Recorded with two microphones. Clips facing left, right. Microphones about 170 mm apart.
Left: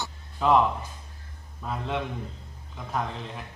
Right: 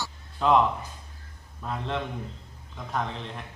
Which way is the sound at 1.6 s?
5° left (ahead or behind).